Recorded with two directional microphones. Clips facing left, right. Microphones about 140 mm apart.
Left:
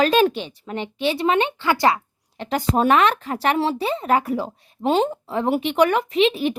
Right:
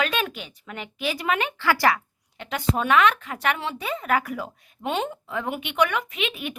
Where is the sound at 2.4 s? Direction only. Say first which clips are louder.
Left 6 dB; 35° left (ahead or behind).